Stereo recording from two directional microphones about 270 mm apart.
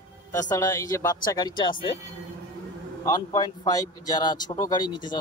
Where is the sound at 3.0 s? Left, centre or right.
Centre.